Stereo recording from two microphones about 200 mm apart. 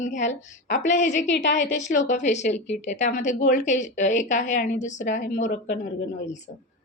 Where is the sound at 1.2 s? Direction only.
65° left (ahead or behind).